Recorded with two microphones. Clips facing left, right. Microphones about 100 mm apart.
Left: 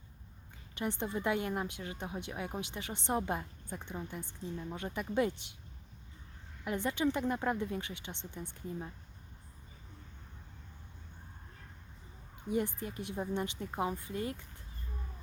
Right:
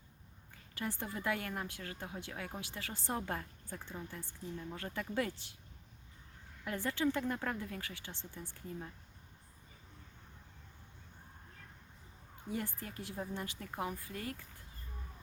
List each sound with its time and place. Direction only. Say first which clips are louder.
0.8 s speech: left 5 dB; 20° left (ahead or behind)
6.7 s speech: left 2 dB; 20° left (ahead or behind)
12.5 s speech: left 7 dB; 20° left (ahead or behind)